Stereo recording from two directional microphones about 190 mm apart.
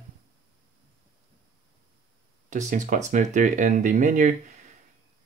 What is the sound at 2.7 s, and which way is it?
Speech, 40° right (ahead or behind).